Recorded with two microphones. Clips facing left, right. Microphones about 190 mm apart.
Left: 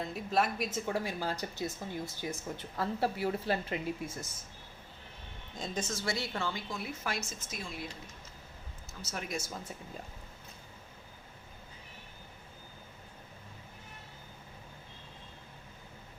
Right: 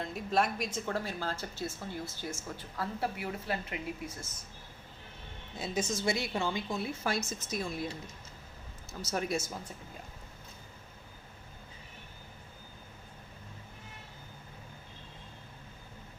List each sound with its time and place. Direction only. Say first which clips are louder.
0.0 s a woman's voice: right 1 dB; centre (ahead or behind); by 4.1 s 30° left (ahead or behind)
5.5 s a woman's voice: right 3 dB; 10° right (ahead or behind)
6.7 s speech: right 4 dB; 25° right (ahead or behind)
8.9 s speech: right 6 dB; 40° right (ahead or behind)